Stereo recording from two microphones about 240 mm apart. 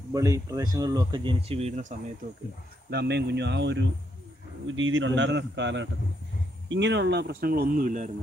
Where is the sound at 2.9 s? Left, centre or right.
Right.